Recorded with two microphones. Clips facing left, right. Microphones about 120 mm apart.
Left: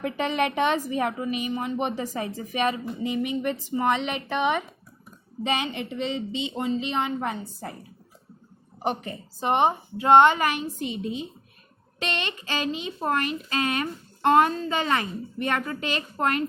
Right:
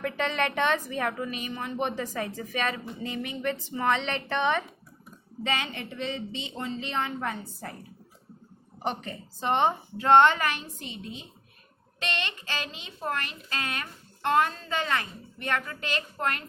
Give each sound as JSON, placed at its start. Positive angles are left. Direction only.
{"t": 0.0, "sound": "a woman's voice", "side_deg": 15}
{"t": 8.8, "sound": "a woman's voice", "side_deg": 10}